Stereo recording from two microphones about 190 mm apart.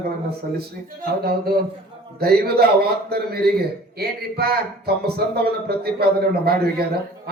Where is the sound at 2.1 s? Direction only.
55° right (ahead or behind).